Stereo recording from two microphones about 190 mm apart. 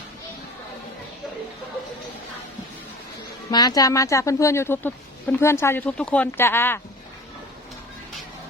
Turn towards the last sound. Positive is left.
turn(degrees=10)  # may be behind; listen again after turning